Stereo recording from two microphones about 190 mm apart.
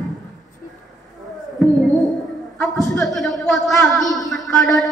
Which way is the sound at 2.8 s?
15° left (ahead or behind).